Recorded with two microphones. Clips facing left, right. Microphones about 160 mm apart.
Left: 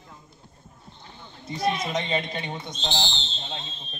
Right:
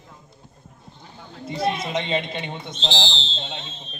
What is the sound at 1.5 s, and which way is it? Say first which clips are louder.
Speech: right 2 dB; 30° right (ahead or behind).